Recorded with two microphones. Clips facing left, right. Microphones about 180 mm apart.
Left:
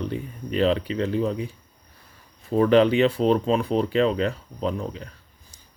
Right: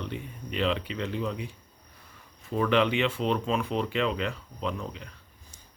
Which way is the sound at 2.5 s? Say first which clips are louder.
Left 7 dB; 40° left (ahead or behind).